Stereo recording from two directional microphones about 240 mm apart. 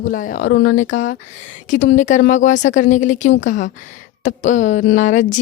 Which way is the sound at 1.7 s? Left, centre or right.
Left.